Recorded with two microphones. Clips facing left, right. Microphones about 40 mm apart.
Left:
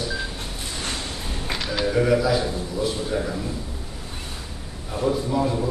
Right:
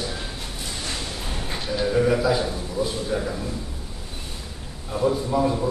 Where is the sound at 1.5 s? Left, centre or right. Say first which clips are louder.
Left 1 dB; left.